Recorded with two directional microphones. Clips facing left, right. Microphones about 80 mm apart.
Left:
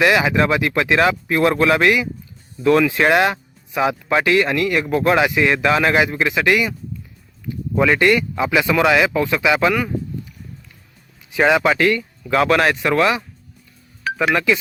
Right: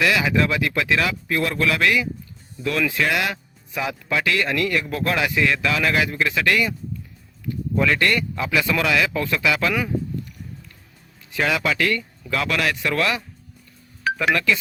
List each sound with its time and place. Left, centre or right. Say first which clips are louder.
0.0 s speech: left 4 dB; left
9.7 s a sound: left 2 dB; centre
11.3 s speech: left 7 dB; left
12.3 s speech: left 7 dB; left
14.3 s speech: left 4 dB; left